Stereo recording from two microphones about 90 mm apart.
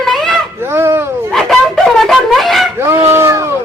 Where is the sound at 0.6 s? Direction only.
25° right (ahead or behind).